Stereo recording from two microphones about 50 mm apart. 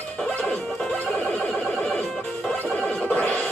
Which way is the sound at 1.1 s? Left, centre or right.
Left.